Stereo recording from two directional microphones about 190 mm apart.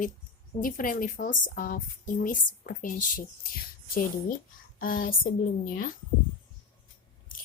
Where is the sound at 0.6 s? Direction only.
45° left (ahead or behind).